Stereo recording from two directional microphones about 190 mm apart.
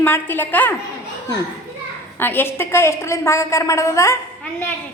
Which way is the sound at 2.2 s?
10° left (ahead or behind).